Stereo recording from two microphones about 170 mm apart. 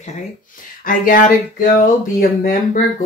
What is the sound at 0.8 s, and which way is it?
Speech, 55° left (ahead or behind).